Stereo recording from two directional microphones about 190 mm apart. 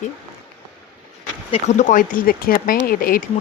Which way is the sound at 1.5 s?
40° left (ahead or behind).